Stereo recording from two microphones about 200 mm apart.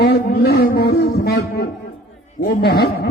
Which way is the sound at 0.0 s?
55° left (ahead or behind).